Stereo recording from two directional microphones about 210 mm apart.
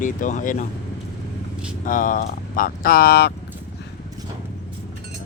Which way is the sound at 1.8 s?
40° left (ahead or behind).